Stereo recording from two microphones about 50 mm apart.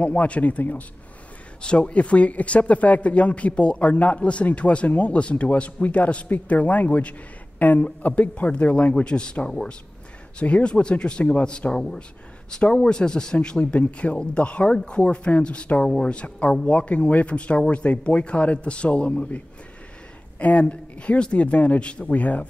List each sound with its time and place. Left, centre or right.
0.0 s speech: left
1.6 s speech: left
15.8 s speech: centre
16.1 s speech: left